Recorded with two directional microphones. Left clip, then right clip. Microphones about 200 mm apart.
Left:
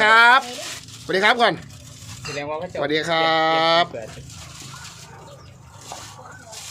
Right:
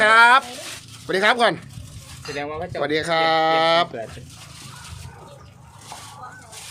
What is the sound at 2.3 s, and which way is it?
Speech, 50° right (ahead or behind).